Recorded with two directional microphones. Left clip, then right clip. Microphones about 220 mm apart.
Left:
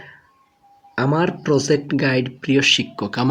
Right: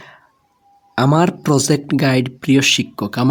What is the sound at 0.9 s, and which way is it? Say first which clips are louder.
Speech: right 4 dB; 55° right (ahead or behind).